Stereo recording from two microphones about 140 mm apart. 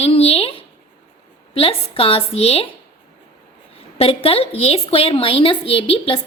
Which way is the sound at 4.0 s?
45° left (ahead or behind).